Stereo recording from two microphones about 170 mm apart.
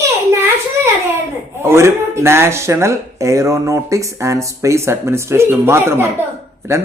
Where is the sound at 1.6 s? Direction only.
15° right (ahead or behind).